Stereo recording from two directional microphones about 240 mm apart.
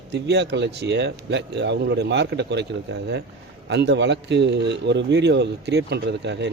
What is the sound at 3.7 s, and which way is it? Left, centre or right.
A man's voice, right.